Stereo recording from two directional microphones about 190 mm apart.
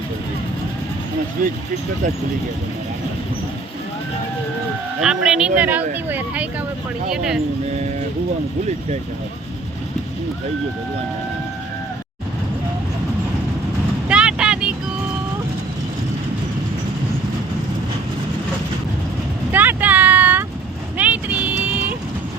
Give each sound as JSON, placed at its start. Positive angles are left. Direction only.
{"t": 4.9, "sound": "speech", "side_deg": 0}
{"t": 14.1, "sound": "vehicle", "side_deg": -5}
{"t": 19.5, "sound": "vehicle", "side_deg": -10}